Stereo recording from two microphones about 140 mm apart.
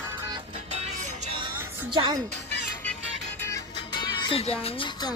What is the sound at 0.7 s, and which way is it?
Music, 50° right (ahead or behind).